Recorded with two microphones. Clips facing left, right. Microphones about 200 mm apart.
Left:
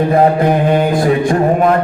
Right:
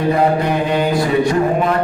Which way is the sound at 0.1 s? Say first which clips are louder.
Left 3 dB; 50° left (ahead or behind).